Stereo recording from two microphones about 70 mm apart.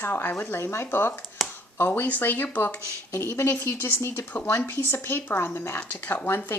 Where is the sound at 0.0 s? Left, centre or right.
Left.